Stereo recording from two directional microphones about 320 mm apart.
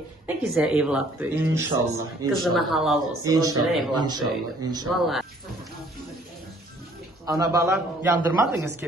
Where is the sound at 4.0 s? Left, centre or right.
Centre.